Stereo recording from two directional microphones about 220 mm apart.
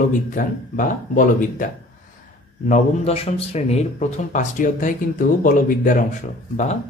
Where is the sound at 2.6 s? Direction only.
30° left (ahead or behind).